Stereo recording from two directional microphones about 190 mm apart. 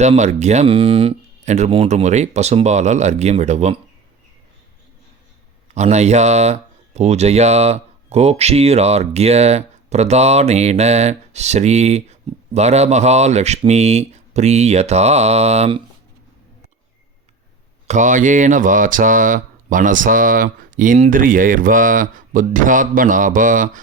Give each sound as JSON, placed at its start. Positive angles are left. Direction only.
{"t": 0.0, "sound": "speech", "side_deg": -35}
{"t": 5.7, "sound": "speech", "side_deg": -35}
{"t": 17.8, "sound": "speech", "side_deg": -40}